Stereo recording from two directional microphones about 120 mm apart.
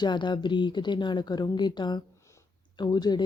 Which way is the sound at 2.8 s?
35° left (ahead or behind).